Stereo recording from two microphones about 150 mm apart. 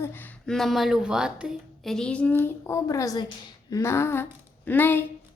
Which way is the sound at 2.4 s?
20° left (ahead or behind).